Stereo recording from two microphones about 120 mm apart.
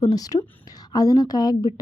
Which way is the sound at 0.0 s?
30° left (ahead or behind).